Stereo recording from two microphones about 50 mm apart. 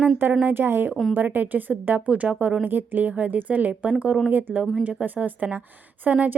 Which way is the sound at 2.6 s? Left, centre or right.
Right.